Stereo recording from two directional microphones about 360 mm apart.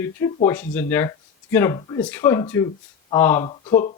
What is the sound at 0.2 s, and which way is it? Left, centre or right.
A man's voice, centre.